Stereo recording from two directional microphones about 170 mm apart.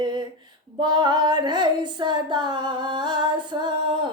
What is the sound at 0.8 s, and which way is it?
Female singing, 25° right (ahead or behind).